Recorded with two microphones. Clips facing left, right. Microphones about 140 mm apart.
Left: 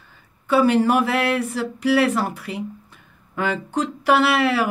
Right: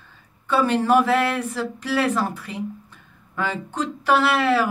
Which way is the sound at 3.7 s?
10° left (ahead or behind).